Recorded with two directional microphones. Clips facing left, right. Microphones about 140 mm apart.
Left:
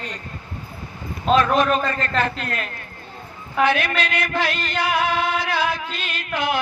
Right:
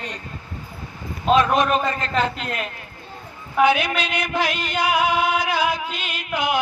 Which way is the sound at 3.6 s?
15° right (ahead or behind).